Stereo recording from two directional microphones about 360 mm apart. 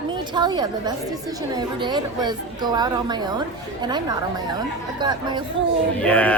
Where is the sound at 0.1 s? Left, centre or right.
Centre.